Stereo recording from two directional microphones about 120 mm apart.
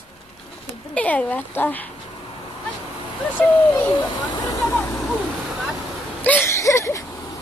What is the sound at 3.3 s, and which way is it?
Speech, 20° left (ahead or behind).